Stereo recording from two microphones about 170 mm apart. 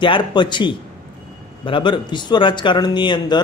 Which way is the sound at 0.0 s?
30° left (ahead or behind).